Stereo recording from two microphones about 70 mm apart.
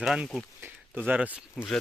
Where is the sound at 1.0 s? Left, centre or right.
Right.